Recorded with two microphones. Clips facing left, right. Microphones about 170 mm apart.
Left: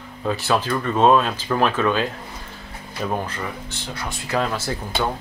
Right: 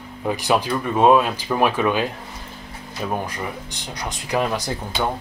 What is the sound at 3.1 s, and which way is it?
Speech, 15° right (ahead or behind).